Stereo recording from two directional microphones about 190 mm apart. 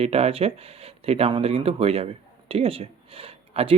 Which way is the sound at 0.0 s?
30° right (ahead or behind).